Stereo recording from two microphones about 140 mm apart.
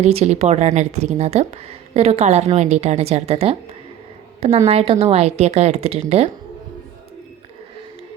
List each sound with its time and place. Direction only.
0.0 s speech: 50° right (ahead or behind)